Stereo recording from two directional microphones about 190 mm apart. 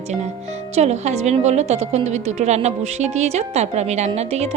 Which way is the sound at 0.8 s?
35° right (ahead or behind).